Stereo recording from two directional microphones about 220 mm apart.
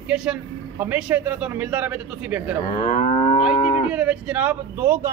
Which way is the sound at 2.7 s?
30° left (ahead or behind).